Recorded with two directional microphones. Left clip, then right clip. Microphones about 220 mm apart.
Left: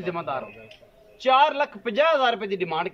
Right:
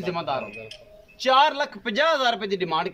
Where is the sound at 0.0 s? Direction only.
Centre (ahead or behind).